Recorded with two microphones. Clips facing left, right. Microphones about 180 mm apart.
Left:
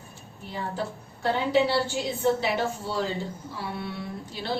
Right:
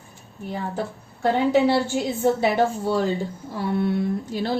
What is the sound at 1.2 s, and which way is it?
A woman's voice, 50° right (ahead or behind).